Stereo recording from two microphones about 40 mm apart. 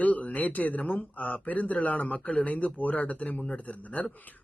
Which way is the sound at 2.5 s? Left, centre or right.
Left.